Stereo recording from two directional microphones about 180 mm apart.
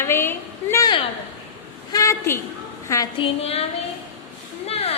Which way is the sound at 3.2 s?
35° left (ahead or behind).